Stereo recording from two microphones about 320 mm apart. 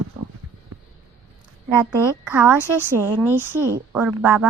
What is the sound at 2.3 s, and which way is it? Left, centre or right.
A woman's voice, centre.